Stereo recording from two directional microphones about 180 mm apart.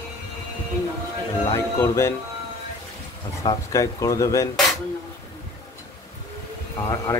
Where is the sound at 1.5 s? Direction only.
15° left (ahead or behind).